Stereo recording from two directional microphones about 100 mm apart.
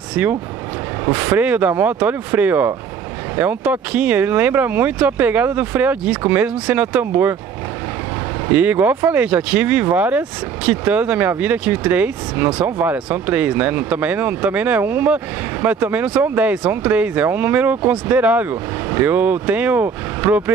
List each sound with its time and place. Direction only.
0.1 s speech: 15° right (ahead or behind)
8.5 s speech: 15° right (ahead or behind)